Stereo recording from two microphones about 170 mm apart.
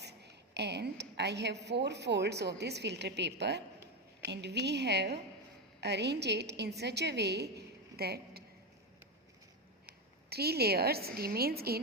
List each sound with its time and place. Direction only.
0.0 s a woman's voice: 80° right
10.2 s a woman's voice: 70° right (ahead or behind)